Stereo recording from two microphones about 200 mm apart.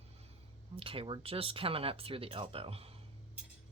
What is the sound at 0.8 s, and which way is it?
Speech, 25° right (ahead or behind).